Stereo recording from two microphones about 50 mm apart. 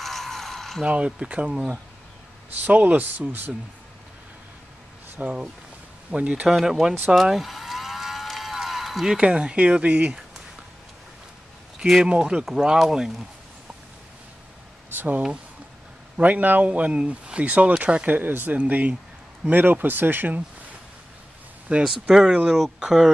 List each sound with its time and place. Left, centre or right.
0.0 s a sound: centre
0.8 s speech: right
2.6 s speech: right
5.2 s speech: right
6.6 s moo: centre
8.3 s a sound: centre
9.1 s speech: centre
12.0 s speech: centre
12.4 s speech: centre
15.0 s speech: right
18.0 s speech: right
19.4 s speech: right
21.7 s speech: right